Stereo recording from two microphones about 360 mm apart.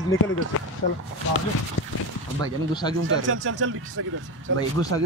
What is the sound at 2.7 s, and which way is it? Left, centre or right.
Speech, centre.